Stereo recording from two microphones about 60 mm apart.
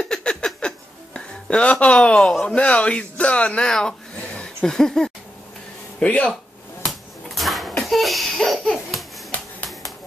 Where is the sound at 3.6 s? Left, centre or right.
Centre.